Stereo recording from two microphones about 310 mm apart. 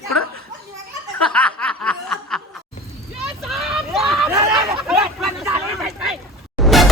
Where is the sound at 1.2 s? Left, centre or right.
Centre.